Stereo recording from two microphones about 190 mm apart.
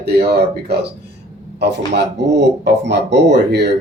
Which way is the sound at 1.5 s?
60° right (ahead or behind).